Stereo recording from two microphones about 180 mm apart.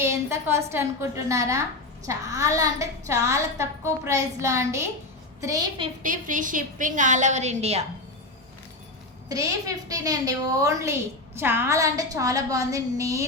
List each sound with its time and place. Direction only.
0.0 s a woman's voice: 15° right (ahead or behind)
6.0 s a woman's voice: 50° right (ahead or behind)
9.3 s a woman's voice: 20° right (ahead or behind)